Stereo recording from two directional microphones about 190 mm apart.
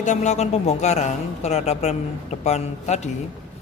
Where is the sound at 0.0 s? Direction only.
40° left (ahead or behind).